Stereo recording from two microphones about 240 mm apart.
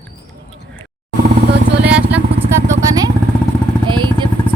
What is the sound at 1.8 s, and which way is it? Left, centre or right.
Vehicle, centre.